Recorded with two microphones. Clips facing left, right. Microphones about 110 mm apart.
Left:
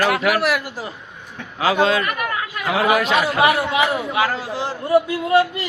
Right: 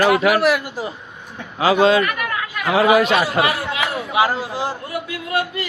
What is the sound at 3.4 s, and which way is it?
Speech, 20° left (ahead or behind).